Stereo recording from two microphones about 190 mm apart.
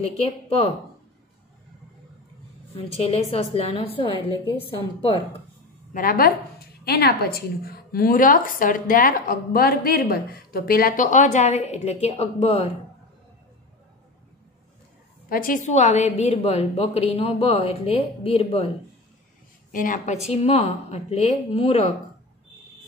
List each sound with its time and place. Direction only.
3.0 s a woman's voice: 30° left (ahead or behind)
5.9 s a woman's voice: 50° left (ahead or behind); by 12.7 s 30° left (ahead or behind)
15.2 s a woman's voice: 50° left (ahead or behind); by 18.7 s 30° left (ahead or behind)
19.7 s a woman's voice: 45° left (ahead or behind)
20.2 s a woman's voice: 35° left (ahead or behind)